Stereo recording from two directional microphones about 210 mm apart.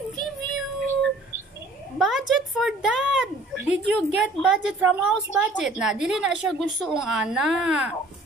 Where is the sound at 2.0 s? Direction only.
Centre (ahead or behind).